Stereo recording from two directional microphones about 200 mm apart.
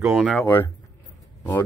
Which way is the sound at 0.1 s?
Centre (ahead or behind).